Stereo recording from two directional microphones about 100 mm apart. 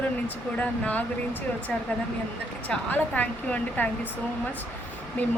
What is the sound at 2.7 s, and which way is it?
Speech, 15° left (ahead or behind).